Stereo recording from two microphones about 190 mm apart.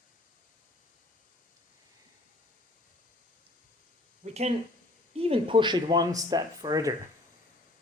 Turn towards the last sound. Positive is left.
turn(degrees=-20)  # may be behind; listen again after turning